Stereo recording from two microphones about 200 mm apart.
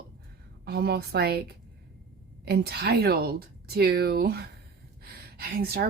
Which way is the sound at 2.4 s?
55° right (ahead or behind).